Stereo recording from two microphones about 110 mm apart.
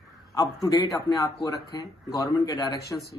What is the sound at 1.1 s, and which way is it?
Speech, 30° left (ahead or behind).